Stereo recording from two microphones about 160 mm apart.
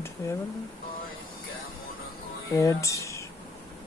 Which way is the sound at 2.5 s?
20° left (ahead or behind).